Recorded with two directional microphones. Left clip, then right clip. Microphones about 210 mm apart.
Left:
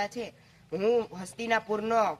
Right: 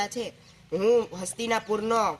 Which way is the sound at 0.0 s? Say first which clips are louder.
Right 3 dB; 15° left (ahead or behind).